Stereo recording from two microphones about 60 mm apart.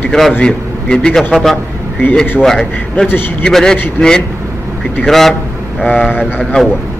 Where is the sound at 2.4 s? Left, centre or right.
Centre.